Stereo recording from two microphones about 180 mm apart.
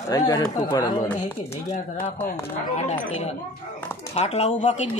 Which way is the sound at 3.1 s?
35° left (ahead or behind).